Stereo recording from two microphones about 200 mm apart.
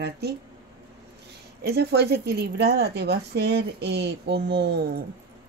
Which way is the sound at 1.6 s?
55° right (ahead or behind).